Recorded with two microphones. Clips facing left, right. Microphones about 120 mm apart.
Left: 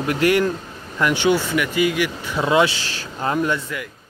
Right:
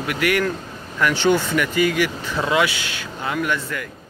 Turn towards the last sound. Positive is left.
turn(degrees=30)  # may be behind; listen again after turning